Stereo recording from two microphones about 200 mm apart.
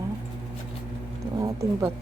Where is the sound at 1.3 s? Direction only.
15° right (ahead or behind).